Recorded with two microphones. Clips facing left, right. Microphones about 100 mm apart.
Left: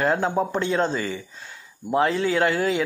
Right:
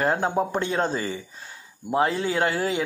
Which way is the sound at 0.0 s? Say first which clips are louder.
Left 1 dB; 40° right (ahead or behind).